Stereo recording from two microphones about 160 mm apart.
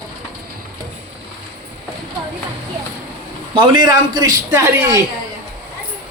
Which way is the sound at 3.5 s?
30° right (ahead or behind).